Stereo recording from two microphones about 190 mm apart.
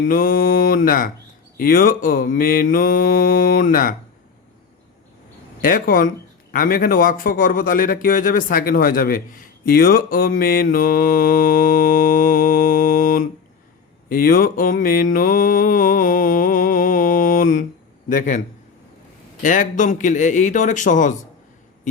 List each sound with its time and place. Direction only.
0.0 s a man's voice: 50° left (ahead or behind)
5.6 s a man's voice: 45° left (ahead or behind)
14.1 s mantra: 50° left (ahead or behind)
18.1 s a man's voice: 40° left (ahead or behind)